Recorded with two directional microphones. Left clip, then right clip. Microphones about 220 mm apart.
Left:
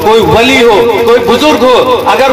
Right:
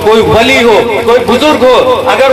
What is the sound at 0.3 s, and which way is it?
A man's voice, 25° left (ahead or behind).